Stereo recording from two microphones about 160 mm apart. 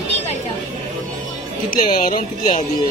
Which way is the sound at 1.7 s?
55° left (ahead or behind).